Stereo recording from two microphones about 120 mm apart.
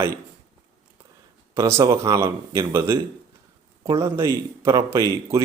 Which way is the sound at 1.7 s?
25° right (ahead or behind).